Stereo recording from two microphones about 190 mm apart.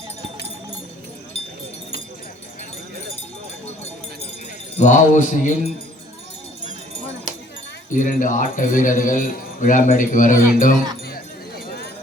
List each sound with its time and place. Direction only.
4.8 s speech: 40° left (ahead or behind)
7.9 s speech: 45° left (ahead or behind)